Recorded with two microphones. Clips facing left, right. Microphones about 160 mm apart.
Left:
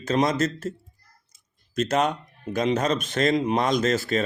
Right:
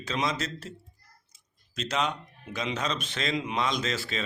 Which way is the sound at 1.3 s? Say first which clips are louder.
Left 12 dB; 50° left (ahead or behind).